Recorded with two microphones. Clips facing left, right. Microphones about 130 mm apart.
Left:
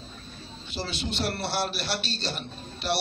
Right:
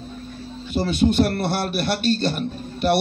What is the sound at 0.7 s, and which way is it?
A man's voice, 50° right (ahead or behind).